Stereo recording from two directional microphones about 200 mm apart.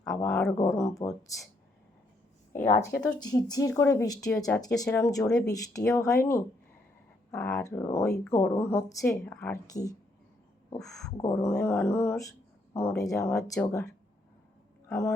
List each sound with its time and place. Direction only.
0.3 s speech: 5° left (ahead or behind)
0.5 s a woman's voice: 15° left (ahead or behind)
3.2 s a woman's voice: 20° left (ahead or behind)
10.8 s speech: centre (ahead or behind)
11.0 s a woman's voice: 15° left (ahead or behind)